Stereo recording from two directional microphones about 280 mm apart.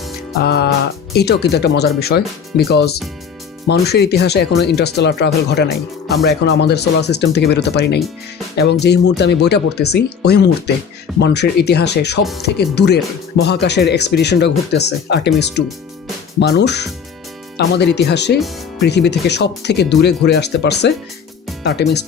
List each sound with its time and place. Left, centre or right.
0.4 s speech: left